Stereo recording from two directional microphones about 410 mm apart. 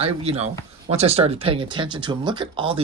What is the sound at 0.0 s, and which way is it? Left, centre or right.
Speech, centre.